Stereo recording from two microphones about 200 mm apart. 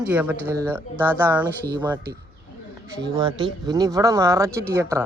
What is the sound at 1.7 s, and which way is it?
Speech, 20° right (ahead or behind).